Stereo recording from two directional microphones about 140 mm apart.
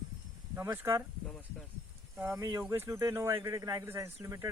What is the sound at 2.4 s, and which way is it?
A man's voice, 20° right (ahead or behind).